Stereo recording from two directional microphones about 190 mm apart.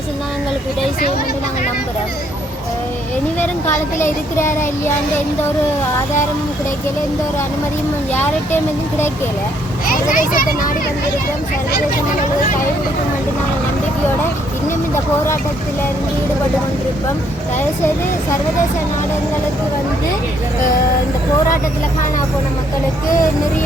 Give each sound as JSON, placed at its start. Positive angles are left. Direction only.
{"t": 3.4, "sound": "speech", "side_deg": 10}
{"t": 9.9, "sound": "a child's voice", "side_deg": 45}